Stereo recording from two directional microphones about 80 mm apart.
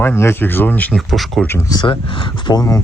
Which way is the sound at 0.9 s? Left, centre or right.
Centre.